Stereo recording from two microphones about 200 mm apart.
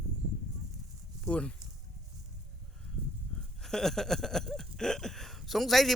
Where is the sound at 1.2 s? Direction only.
5° left (ahead or behind).